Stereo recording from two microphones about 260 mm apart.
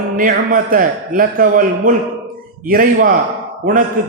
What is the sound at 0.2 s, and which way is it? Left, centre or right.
A man's voice, right.